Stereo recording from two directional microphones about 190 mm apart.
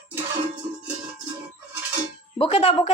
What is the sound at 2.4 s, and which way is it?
Speech, 30° left (ahead or behind).